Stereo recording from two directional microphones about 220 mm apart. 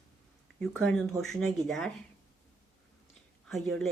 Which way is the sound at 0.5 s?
5° left (ahead or behind).